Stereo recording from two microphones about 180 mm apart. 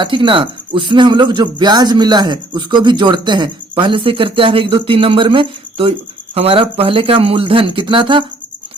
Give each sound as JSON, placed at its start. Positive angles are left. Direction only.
{"t": 0.0, "sound": "speech", "side_deg": -30}